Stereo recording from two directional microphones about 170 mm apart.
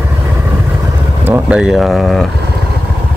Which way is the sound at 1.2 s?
10° right (ahead or behind).